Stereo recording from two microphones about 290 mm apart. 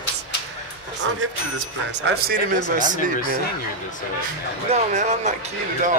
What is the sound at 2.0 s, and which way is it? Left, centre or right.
Speech, right.